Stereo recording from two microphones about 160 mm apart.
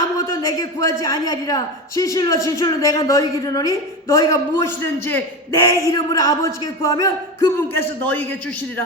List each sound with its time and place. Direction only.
0.2 s a woman's voice: 20° left (ahead or behind)